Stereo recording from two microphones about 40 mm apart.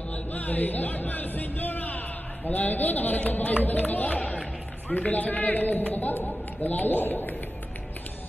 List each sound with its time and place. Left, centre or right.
0.3 s a man's voice: left